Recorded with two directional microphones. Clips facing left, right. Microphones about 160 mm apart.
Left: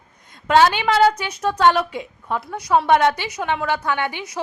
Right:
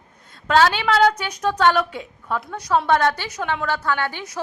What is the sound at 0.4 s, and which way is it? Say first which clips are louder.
A woman's voice: left 2 dB; 10° left (ahead or behind).